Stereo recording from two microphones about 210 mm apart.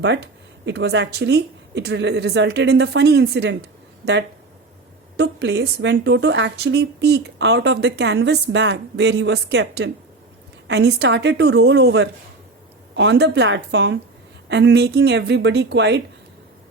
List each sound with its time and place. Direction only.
0.0 s a woman's voice: 55° right (ahead or behind)